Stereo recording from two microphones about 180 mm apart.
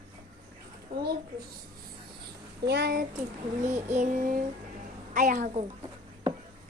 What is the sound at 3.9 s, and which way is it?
Child singing, 45° right (ahead or behind).